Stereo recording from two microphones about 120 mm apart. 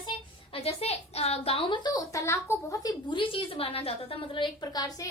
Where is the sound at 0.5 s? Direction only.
60° left (ahead or behind).